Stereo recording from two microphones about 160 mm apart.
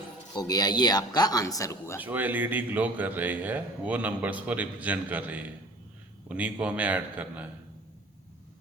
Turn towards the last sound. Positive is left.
turn(degrees=-10)  # may be behind; listen again after turning